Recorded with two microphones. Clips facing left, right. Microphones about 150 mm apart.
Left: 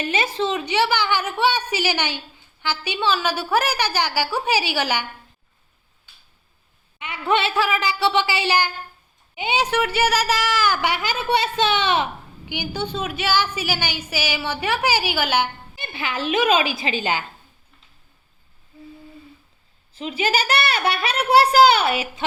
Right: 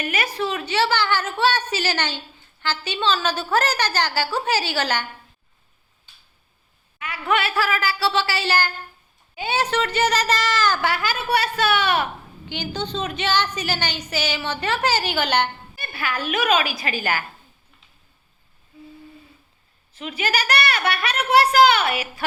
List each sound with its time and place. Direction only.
0.0 s a woman's voice: 25° left (ahead or behind)
7.0 s a woman's voice: 25° left (ahead or behind)
12.5 s a woman's voice: 10° left (ahead or behind)
15.7 s speech: 20° left (ahead or behind)
20.0 s speech: 30° left (ahead or behind)